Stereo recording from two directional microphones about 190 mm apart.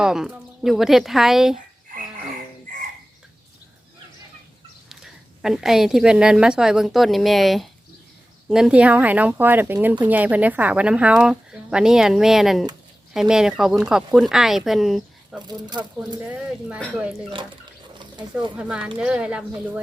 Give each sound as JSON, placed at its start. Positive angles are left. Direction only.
{"t": 0.0, "sound": "speech", "side_deg": -5}
{"t": 5.4, "sound": "speech", "side_deg": 0}
{"t": 15.4, "sound": "speech", "side_deg": -25}
{"t": 16.6, "sound": "speech", "side_deg": -5}
{"t": 18.5, "sound": "speech", "side_deg": -5}